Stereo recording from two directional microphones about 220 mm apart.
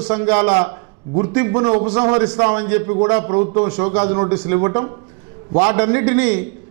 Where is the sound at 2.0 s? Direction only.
10° right (ahead or behind).